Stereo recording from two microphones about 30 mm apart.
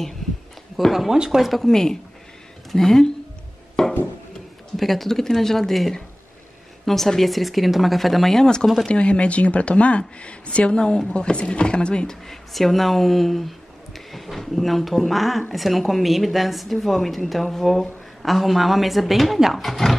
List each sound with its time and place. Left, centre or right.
0.8 s a woman's voice: centre
1.1 s speech: right
1.6 s speech: centre
3.8 s wood: left
4.7 s a woman's voice: centre
8.8 s speech: left
12.5 s a woman's voice: centre